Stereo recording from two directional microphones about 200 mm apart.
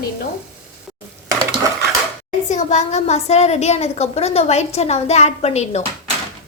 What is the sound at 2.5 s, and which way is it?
A woman's voice, 35° left (ahead or behind).